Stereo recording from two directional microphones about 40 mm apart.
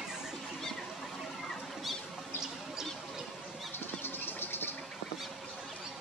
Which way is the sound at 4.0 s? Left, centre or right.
Left.